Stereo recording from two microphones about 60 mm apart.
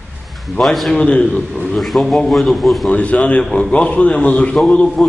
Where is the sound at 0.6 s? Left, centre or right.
Centre.